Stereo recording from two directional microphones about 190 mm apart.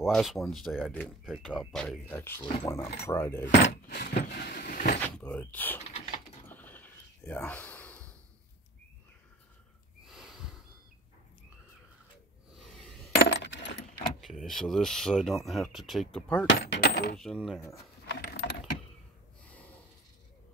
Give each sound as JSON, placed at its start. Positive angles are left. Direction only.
{"t": 0.0, "sound": "speech", "side_deg": 0}
{"t": 3.6, "sound": "keys jangling", "side_deg": 60}
{"t": 5.0, "sound": "door", "side_deg": 5}
{"t": 5.8, "sound": "typing", "side_deg": 40}
{"t": 6.4, "sound": "a sound", "side_deg": 10}
{"t": 10.0, "sound": "snort", "side_deg": 0}
{"t": 13.1, "sound": "coin", "side_deg": 70}
{"t": 14.2, "sound": "speech", "side_deg": 0}
{"t": 16.4, "sound": "a sound", "side_deg": 65}
{"t": 17.2, "sound": "speech", "side_deg": 0}
{"t": 18.2, "sound": "keys jangling", "side_deg": 65}